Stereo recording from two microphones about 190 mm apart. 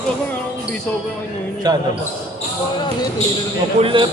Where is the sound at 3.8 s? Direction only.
25° right (ahead or behind).